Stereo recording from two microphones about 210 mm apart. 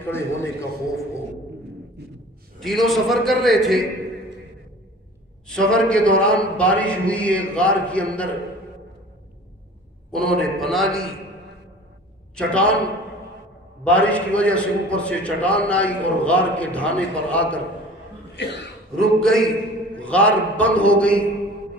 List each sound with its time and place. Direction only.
0.0 s a man's voice: 10° left (ahead or behind)
2.0 s a sound: 50° right (ahead or behind)
2.6 s a man's voice: centre (ahead or behind)
5.5 s a man's voice: 5° left (ahead or behind)
10.1 s a man's voice: centre (ahead or behind)
12.4 s a man's voice: 5° left (ahead or behind)
13.8 s a man's voice: 5° left (ahead or behind)
18.4 s speech: 55° left (ahead or behind)
18.9 s a man's voice: centre (ahead or behind)